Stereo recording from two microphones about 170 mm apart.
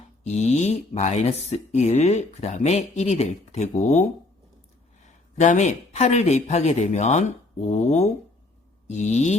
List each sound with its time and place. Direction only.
0.3 s speech: 40° left (ahead or behind)
5.0 s speech: 45° left (ahead or behind)
8.9 s a sound: 40° left (ahead or behind)